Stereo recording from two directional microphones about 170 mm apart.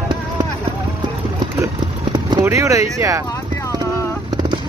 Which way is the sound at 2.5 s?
15° right (ahead or behind).